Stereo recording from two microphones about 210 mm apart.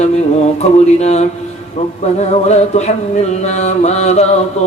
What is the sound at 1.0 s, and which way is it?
Chant, 30° left (ahead or behind).